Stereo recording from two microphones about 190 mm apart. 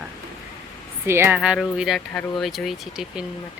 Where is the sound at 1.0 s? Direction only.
15° right (ahead or behind).